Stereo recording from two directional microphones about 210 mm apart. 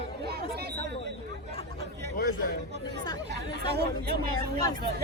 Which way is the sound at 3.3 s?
50° right (ahead or behind).